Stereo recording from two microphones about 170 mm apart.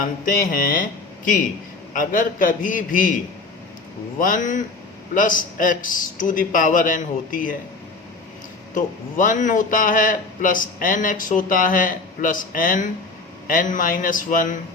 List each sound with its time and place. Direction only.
0.0 s a man's voice: 55° left (ahead or behind)
4.2 s a man's voice: 50° left (ahead or behind)
8.7 s a man's voice: 50° left (ahead or behind)